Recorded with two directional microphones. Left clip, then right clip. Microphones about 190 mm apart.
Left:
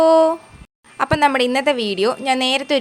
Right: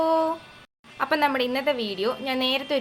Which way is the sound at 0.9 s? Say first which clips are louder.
Left 7 dB; 60° left (ahead or behind).